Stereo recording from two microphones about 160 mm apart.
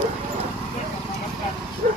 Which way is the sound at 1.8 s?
55° right (ahead or behind).